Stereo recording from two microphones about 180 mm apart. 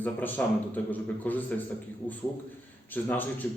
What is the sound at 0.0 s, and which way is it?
A man's voice, 10° left (ahead or behind).